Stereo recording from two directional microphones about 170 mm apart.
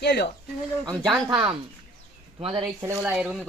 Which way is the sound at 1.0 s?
Centre (ahead or behind).